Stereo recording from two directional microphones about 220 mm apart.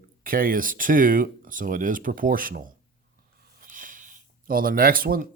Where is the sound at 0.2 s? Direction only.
40° right (ahead or behind).